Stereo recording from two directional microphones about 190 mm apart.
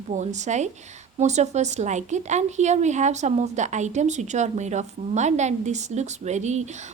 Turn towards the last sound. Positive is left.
turn(degrees=-35)  # may be behind; listen again after turning